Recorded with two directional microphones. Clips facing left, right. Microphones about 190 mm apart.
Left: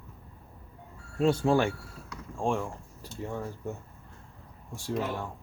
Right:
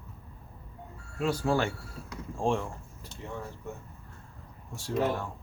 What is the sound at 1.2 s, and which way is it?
Speech, 25° left (ahead or behind).